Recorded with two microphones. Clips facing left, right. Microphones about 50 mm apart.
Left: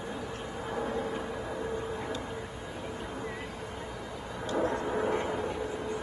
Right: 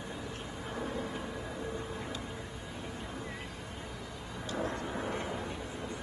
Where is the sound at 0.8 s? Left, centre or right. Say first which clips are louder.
Left 4 dB; left.